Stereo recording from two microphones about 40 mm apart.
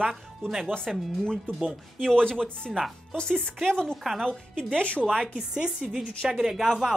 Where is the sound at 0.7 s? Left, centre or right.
Centre.